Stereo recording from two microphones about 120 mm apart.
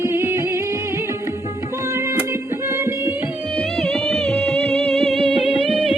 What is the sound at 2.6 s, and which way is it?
Music, 20° right (ahead or behind).